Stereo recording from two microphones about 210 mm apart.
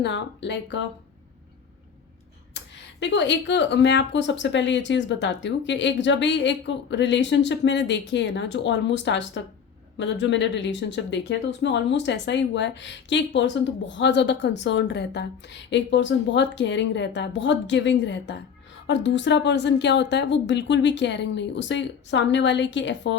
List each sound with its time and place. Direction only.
0.0 s speech: 55° left (ahead or behind)
2.5 s speech: 55° left (ahead or behind)